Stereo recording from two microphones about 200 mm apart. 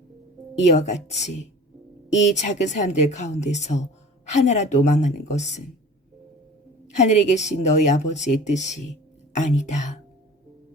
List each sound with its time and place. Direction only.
0.5 s a woman's voice: 35° left (ahead or behind)
6.8 s a woman's voice: 35° left (ahead or behind)